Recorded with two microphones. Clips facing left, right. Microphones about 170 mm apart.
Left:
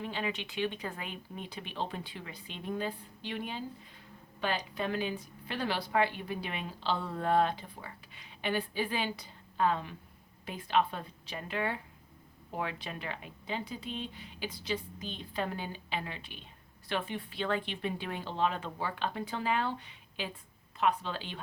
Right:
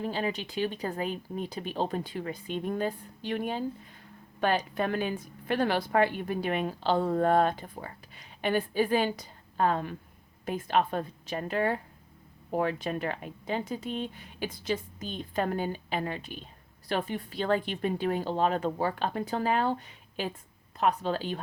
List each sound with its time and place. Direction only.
0.0 s a woman's voice: 40° right (ahead or behind)